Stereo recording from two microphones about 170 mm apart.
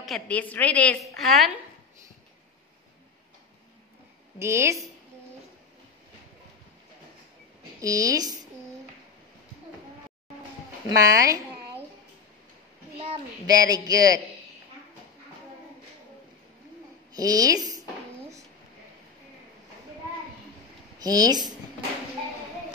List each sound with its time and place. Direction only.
0.0 s a woman's voice: 5° left (ahead or behind)
4.4 s a woman's voice: 15° right (ahead or behind)
7.8 s speech: 20° right (ahead or behind)
11.0 s speech: 20° right (ahead or behind)
13.5 s speech: 20° right (ahead or behind)
17.1 s a woman's voice: 20° right (ahead or behind)
21.0 s speech: 20° right (ahead or behind)